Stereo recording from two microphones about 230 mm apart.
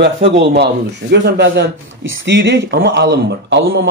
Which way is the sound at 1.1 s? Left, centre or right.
Right.